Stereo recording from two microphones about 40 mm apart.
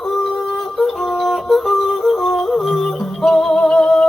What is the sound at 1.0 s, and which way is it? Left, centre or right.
Music, centre.